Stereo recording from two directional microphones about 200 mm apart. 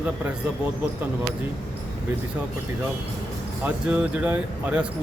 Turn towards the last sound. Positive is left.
turn(degrees=-5)  # may be behind; listen again after turning